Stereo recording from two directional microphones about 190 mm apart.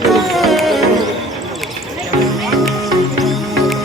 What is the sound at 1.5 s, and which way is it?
Basketball bounce, centre (ahead or behind).